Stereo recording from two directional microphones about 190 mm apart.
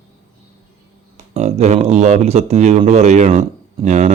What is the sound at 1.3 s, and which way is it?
Speech, 35° right (ahead or behind).